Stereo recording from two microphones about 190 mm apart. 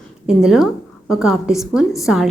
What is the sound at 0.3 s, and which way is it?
A woman's voice, 5° right (ahead or behind).